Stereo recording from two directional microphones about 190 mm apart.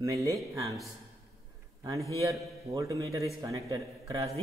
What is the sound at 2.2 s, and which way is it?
Speech, 15° right (ahead or behind).